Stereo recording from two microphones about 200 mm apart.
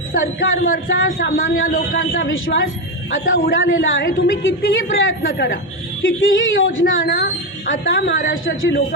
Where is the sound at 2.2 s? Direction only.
75° left (ahead or behind).